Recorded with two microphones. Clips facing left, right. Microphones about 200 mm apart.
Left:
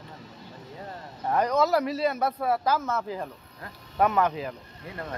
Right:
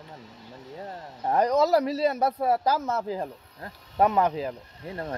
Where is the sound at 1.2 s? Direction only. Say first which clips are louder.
Right 2 dB; 35° right (ahead or behind).